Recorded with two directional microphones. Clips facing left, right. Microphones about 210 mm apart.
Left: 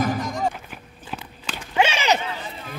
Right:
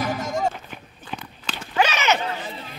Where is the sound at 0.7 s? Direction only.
5° left (ahead or behind).